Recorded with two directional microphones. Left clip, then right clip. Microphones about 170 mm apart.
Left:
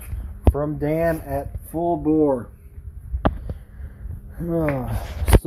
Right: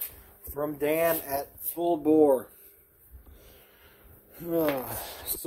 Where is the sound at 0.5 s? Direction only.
25° right (ahead or behind).